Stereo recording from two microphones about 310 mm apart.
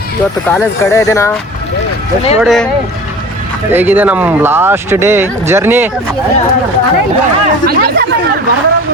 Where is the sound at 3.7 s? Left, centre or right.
Centre.